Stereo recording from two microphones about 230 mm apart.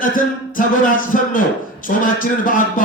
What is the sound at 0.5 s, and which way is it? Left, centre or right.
Speech, left.